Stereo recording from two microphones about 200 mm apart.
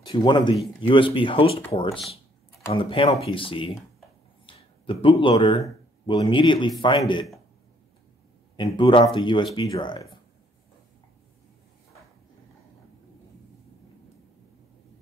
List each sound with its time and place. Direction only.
0.0 s speech: 20° left (ahead or behind)
4.5 s a sound: 25° left (ahead or behind)
5.0 s speech: 25° left (ahead or behind)
8.5 s speech: 25° left (ahead or behind)